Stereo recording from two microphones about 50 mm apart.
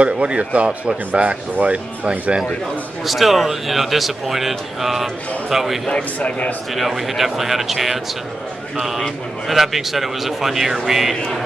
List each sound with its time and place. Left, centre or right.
0.0 s speech: right
3.1 s a man's voice: centre
6.1 s speech: left
6.7 s a man's voice: centre